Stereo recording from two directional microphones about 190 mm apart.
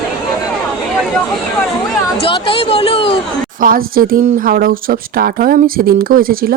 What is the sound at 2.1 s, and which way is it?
Speech, 30° left (ahead or behind).